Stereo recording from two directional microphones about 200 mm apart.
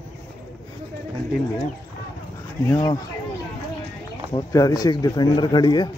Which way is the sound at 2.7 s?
20° left (ahead or behind).